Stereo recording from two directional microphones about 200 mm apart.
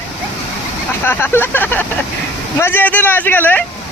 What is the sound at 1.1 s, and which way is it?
Speech, 10° left (ahead or behind).